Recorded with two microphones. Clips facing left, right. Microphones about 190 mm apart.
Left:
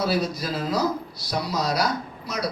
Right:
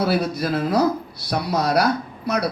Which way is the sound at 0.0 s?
60° right (ahead or behind).